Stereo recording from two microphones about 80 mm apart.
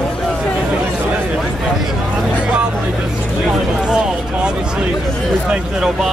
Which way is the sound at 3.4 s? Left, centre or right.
Centre.